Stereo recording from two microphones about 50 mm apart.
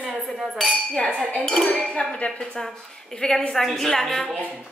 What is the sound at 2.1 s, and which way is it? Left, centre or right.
Dishes, left.